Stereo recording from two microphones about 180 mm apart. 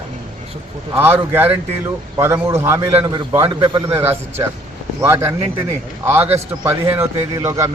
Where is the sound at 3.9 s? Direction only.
10° right (ahead or behind).